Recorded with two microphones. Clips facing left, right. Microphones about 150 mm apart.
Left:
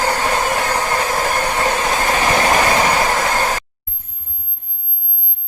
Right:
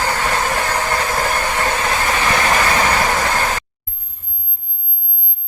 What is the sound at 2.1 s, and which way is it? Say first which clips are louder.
Train: left 2 dB; 40° left (ahead or behind).